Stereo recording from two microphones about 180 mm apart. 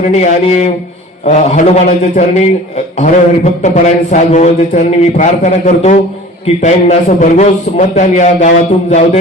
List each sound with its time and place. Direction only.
0.1 s a man's voice: 40° left (ahead or behind)